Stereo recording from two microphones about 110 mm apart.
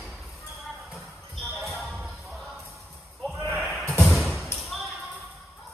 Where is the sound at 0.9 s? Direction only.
Centre (ahead or behind).